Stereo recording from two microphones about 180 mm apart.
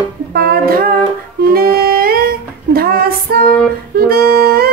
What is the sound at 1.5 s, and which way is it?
Music, 55° right (ahead or behind).